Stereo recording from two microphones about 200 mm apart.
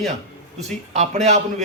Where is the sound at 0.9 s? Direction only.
35° right (ahead or behind).